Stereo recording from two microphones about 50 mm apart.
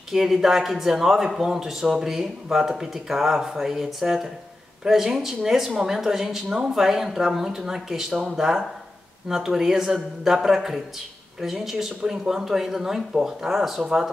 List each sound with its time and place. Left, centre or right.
0.1 s a woman's voice: centre